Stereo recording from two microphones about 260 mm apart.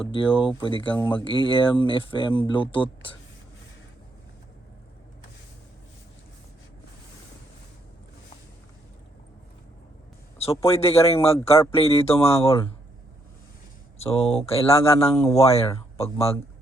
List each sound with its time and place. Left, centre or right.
0.0 s speech: centre
10.3 s speech: left
14.0 s speech: left